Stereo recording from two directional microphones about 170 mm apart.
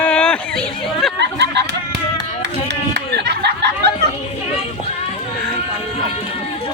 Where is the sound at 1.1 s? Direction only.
85° right.